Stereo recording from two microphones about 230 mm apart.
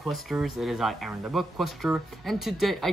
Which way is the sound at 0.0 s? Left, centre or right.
Centre.